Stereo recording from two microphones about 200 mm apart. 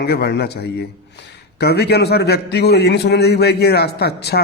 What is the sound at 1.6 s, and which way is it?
A man's voice, 55° left (ahead or behind).